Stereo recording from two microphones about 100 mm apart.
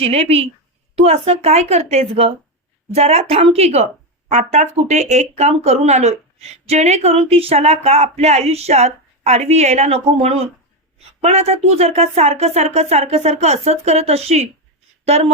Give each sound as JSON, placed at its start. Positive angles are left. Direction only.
{"t": 0.0, "sound": "speech", "side_deg": -80}